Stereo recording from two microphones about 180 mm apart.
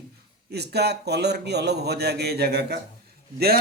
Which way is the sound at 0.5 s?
65° right (ahead or behind).